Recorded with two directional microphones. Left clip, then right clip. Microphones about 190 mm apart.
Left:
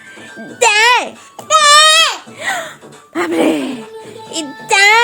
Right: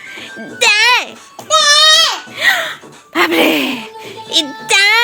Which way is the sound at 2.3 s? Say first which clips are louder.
Right 7 dB; 5° left (ahead or behind).